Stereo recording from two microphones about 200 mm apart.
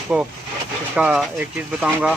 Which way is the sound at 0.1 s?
Centre (ahead or behind).